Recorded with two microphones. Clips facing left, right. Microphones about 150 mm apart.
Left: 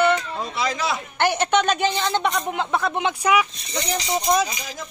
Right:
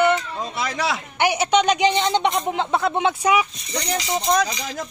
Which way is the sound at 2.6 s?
25° right (ahead or behind).